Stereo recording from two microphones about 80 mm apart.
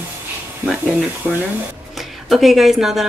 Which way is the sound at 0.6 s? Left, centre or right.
Right.